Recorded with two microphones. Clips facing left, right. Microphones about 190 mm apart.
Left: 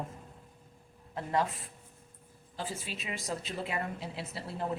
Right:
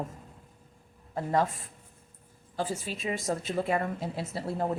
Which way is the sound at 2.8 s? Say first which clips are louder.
Right 7 dB; 45° right (ahead or behind).